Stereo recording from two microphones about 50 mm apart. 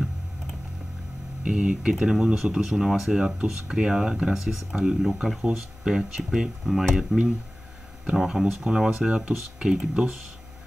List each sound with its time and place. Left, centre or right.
1.5 s speech: centre
8.2 s speech: centre